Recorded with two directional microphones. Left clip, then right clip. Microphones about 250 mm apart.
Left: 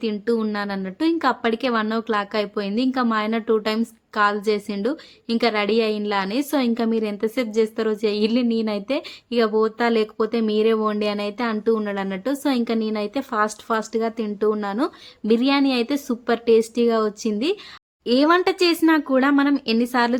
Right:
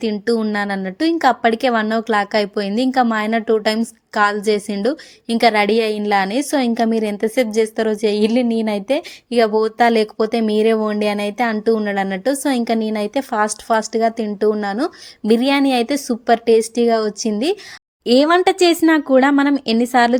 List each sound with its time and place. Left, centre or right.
0.0 s a woman's voice: centre